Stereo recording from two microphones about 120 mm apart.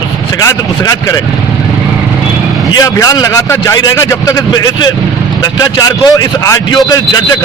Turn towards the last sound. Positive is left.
turn(degrees=30)  # may be behind; listen again after turning